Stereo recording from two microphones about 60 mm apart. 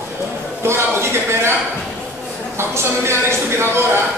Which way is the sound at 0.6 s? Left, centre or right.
Right.